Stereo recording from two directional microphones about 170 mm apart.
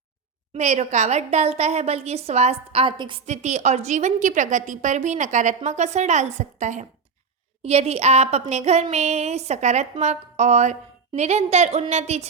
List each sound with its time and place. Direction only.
0.5 s a woman's voice: 40° right (ahead or behind)
3.2 s a woman's voice: 45° right (ahead or behind)